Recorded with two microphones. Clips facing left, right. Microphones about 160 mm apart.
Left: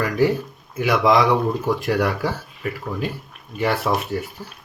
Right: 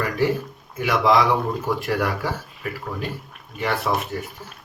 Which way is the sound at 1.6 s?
Centre (ahead or behind).